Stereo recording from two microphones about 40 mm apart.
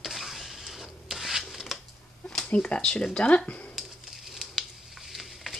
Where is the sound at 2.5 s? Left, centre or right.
Left.